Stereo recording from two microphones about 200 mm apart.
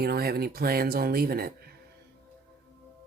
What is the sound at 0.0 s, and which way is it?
Speech, 50° right (ahead or behind).